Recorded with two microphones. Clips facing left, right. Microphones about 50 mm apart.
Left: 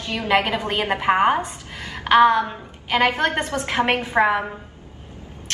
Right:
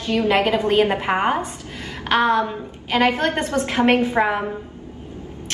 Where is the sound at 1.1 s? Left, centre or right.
Centre.